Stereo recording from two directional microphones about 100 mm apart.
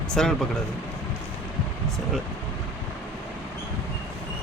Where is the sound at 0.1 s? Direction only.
5° left (ahead or behind).